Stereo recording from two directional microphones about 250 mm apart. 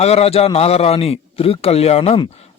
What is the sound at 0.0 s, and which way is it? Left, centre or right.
Speech, left.